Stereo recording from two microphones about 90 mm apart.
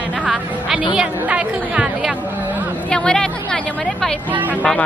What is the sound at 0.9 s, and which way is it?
A woman's voice, 10° right (ahead or behind).